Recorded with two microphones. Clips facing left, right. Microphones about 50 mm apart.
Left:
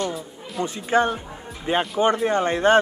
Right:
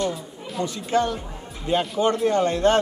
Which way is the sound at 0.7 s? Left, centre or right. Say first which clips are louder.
Left 3 dB; left.